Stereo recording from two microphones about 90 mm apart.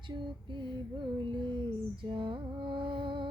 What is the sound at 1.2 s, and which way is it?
Music, 60° right (ahead or behind).